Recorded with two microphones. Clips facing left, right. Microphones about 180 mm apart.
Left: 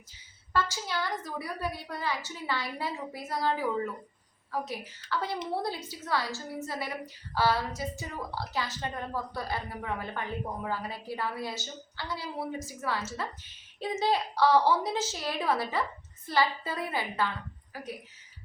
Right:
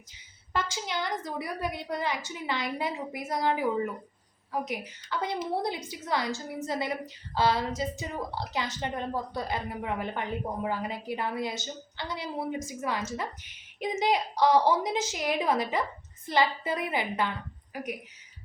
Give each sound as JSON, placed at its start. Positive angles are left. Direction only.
{"t": 0.5, "sound": "a woman's voice", "side_deg": -20}